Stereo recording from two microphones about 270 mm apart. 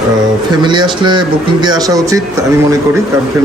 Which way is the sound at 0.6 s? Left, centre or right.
Centre.